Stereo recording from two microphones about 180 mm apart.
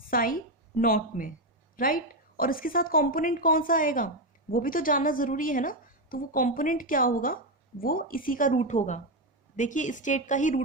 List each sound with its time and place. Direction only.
0.1 s a woman's voice: 50° left (ahead or behind)